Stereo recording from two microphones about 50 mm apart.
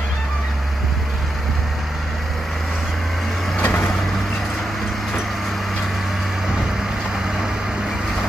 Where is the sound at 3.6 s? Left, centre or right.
Left.